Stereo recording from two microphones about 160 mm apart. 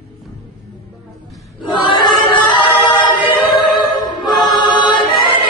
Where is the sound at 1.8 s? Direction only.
30° left (ahead or behind).